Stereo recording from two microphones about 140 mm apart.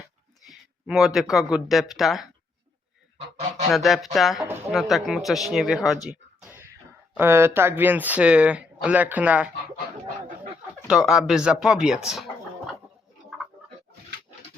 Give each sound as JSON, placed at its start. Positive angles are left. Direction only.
{"t": 0.4, "sound": "speech", "side_deg": 0}
{"t": 3.7, "sound": "speech", "side_deg": 0}
{"t": 6.4, "sound": "a sound", "side_deg": -15}
{"t": 7.2, "sound": "speech", "side_deg": -15}
{"t": 10.8, "sound": "speech", "side_deg": -5}